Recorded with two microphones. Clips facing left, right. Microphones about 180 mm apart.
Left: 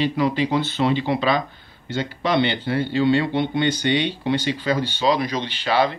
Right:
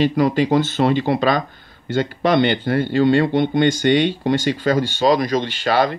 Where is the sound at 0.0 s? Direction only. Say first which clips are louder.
Right 4 dB; 45° right (ahead or behind).